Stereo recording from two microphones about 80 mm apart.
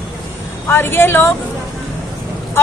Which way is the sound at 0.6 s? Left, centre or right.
Left.